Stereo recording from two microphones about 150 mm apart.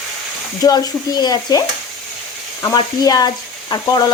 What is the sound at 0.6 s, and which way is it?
Speech, 25° left (ahead or behind).